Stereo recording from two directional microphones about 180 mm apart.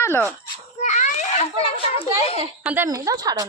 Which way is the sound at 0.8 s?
40° left (ahead or behind).